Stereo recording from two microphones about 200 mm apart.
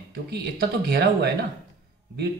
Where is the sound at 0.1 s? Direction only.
55° right (ahead or behind).